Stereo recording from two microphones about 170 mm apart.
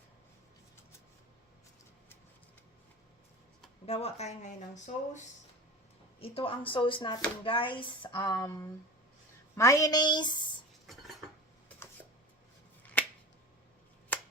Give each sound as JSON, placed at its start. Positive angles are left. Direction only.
{"t": 3.8, "sound": "speech", "side_deg": 35}
{"t": 6.1, "sound": "speech", "side_deg": 35}
{"t": 12.8, "sound": "finger snapping", "side_deg": 10}